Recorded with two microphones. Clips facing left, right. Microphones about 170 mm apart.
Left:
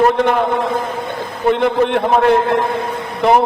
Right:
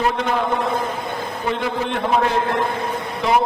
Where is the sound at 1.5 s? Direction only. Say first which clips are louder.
Left 10 dB; 60° left (ahead or behind).